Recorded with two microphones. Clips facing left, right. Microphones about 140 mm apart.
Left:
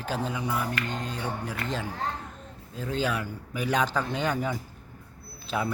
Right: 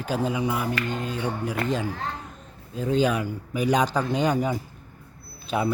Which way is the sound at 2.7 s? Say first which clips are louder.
Right 6 dB; 15° right (ahead or behind).